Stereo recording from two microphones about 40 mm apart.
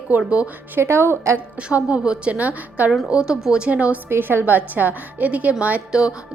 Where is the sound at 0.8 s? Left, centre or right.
Right.